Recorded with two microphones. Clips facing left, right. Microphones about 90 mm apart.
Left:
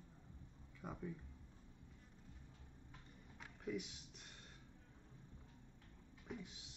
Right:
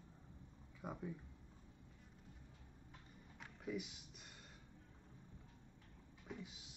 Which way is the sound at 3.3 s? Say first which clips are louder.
Even; centre (ahead or behind).